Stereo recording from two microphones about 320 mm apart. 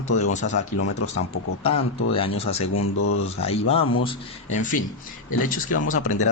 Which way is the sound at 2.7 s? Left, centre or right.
Left.